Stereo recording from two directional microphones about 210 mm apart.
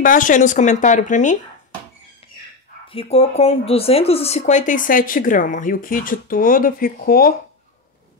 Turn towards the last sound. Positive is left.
turn(degrees=45)  # may be behind; listen again after turning